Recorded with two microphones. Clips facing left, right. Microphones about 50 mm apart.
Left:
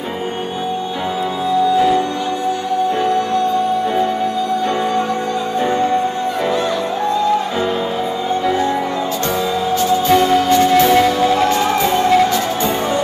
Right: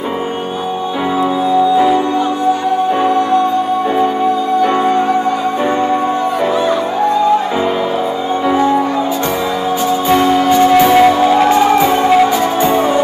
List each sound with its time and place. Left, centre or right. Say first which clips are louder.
10.0 s music: right 3 dB; centre